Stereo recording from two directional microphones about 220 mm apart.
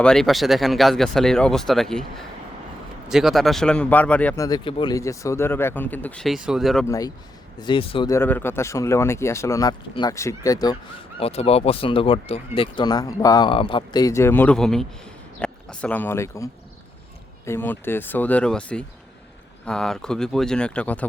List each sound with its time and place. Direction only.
0.0 s speech: 5° left (ahead or behind)
4.4 s speech: 20° left (ahead or behind); by 6.8 s centre (ahead or behind)
6.8 s speech: 15° left (ahead or behind)
11.2 s speech: 25° left (ahead or behind); by 21.1 s 5° left (ahead or behind)